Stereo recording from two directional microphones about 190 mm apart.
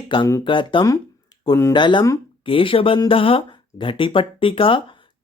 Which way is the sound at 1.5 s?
15° left (ahead or behind).